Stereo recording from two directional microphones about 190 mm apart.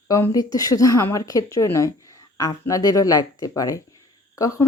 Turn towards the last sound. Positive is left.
turn(degrees=15)  # may be behind; listen again after turning